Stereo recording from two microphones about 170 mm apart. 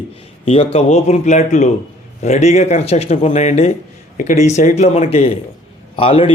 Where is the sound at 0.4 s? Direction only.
35° left (ahead or behind).